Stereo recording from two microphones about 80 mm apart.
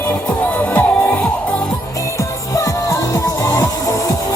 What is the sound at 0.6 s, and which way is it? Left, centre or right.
Music, centre.